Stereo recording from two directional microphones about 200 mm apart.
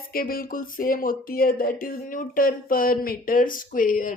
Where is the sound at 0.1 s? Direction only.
45° left (ahead or behind).